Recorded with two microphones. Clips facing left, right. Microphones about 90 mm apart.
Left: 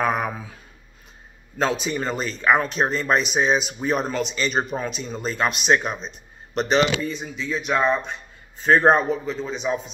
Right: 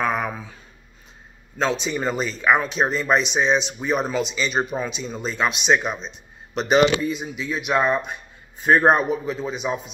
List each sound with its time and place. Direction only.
0.0 s speech: 5° left (ahead or behind)
1.6 s speech: 5° left (ahead or behind)
7.1 s speech: 10° right (ahead or behind)